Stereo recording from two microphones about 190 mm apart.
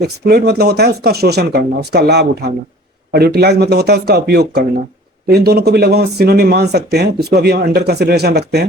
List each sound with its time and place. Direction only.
0.0 s speech: 60° right (ahead or behind)